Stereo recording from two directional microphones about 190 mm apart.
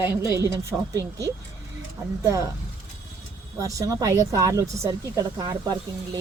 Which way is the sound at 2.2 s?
15° right (ahead or behind).